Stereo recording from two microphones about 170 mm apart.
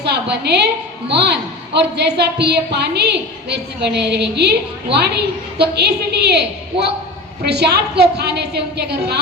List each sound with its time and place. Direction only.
0.0 s a woman's voice: 80° right